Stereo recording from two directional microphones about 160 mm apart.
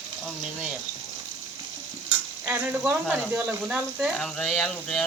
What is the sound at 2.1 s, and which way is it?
Stir, 10° right (ahead or behind).